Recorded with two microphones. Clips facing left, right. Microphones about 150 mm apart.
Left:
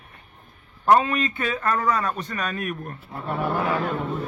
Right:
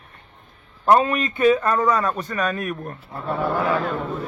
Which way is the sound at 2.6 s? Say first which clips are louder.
Right 2 dB; 35° right (ahead or behind).